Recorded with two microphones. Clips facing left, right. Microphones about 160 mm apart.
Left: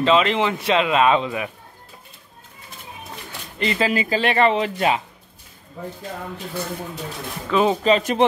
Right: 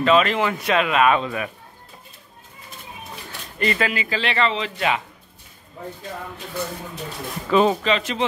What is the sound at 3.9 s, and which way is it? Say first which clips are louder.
A man's voice: left 5 dB; 40° left (ahead or behind).